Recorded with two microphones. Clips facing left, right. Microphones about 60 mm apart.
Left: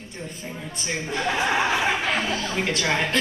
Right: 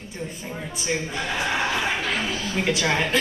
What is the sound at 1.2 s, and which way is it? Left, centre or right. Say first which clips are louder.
Chuckle: left 5 dB; centre.